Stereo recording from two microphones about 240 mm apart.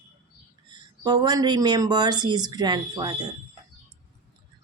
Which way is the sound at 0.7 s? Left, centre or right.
Centre.